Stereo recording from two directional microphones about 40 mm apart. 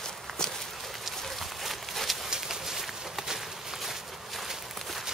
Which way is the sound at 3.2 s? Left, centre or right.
Centre.